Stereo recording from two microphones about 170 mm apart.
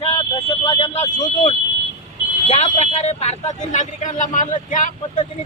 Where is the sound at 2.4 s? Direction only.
40° left (ahead or behind).